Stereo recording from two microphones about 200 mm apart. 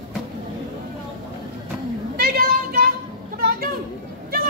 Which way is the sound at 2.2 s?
45° right (ahead or behind).